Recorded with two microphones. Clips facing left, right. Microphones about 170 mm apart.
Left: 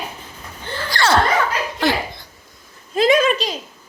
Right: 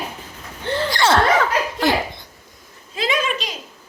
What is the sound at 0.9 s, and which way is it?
Speech, 20° right (ahead or behind).